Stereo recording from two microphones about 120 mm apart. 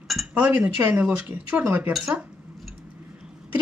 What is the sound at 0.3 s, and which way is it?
Speech, 15° right (ahead or behind).